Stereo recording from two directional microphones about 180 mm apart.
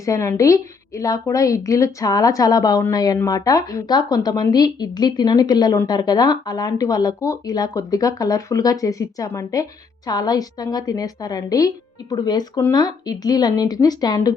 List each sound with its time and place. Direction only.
0.0 s a woman's voice: 15° left (ahead or behind)